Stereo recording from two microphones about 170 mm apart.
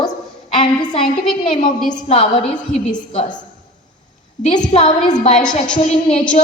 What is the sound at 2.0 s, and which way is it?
Speech, 35° left (ahead or behind).